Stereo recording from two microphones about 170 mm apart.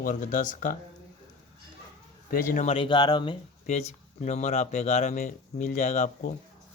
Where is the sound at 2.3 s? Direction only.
50° left (ahead or behind); by 3.4 s 25° left (ahead or behind).